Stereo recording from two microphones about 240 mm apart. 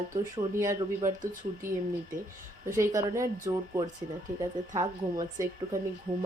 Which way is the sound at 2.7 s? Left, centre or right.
Centre.